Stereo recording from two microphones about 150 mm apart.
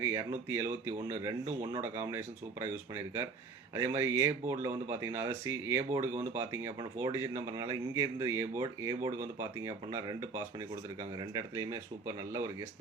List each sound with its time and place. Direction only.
0.0 s speech: 20° right (ahead or behind)